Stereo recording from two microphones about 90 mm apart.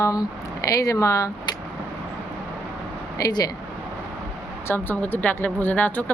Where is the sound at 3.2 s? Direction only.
45° left (ahead or behind).